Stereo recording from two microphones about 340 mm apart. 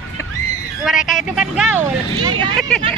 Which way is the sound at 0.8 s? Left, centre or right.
Centre.